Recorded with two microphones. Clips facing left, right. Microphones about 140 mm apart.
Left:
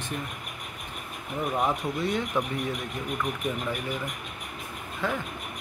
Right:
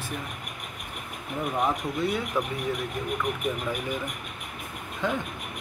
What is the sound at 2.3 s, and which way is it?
Speech, 5° right (ahead or behind).